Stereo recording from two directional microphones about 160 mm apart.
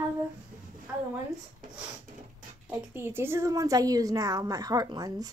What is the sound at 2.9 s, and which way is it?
A woman's voice, 15° right (ahead or behind).